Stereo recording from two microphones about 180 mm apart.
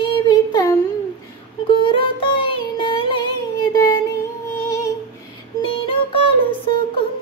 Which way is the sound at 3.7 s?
25° left (ahead or behind).